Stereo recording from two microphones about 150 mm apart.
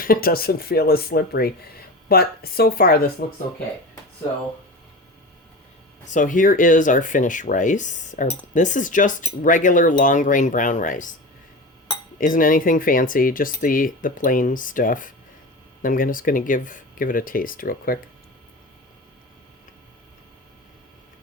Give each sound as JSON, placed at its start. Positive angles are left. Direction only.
{"t": 0.0, "sound": "speech", "side_deg": 75}
{"t": 6.1, "sound": "speech", "side_deg": 60}
{"t": 12.2, "sound": "speech", "side_deg": 65}